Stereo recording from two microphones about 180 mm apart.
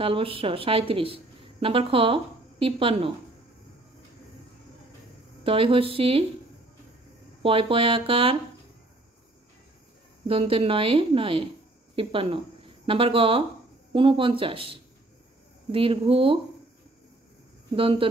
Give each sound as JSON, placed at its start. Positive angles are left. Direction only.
{"t": 0.0, "sound": "a woman's voice", "side_deg": -30}
{"t": 5.4, "sound": "a woman's voice", "side_deg": -30}
{"t": 7.4, "sound": "a woman's voice", "side_deg": -30}
{"t": 10.2, "sound": "a woman's voice", "side_deg": -30}
{"t": 17.7, "sound": "speech", "side_deg": -30}